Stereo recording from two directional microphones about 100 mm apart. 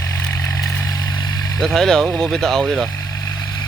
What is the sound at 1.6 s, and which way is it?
Speech, 5° left (ahead or behind).